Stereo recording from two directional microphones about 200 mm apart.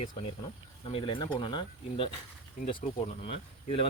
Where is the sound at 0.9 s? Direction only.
25° left (ahead or behind).